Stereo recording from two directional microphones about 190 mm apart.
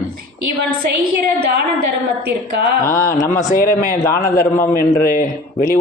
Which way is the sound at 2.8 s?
15° left (ahead or behind).